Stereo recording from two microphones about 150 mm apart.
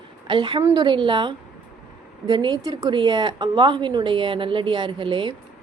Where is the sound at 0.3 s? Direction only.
35° right (ahead or behind).